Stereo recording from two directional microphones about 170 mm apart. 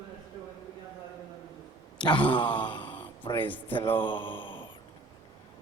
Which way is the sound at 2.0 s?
30° left (ahead or behind).